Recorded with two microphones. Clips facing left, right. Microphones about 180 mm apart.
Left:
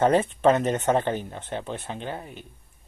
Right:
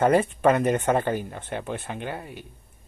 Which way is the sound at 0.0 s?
10° right (ahead or behind).